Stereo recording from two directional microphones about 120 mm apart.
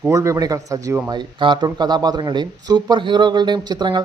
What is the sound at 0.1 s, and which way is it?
Speech, 25° right (ahead or behind).